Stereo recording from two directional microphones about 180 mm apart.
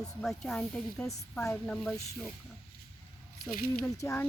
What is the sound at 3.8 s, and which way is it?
Speech, 15° left (ahead or behind).